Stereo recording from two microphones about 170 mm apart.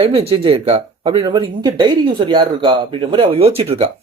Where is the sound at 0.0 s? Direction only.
35° right (ahead or behind).